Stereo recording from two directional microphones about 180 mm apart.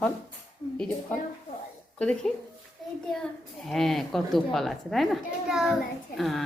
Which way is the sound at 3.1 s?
5° left (ahead or behind).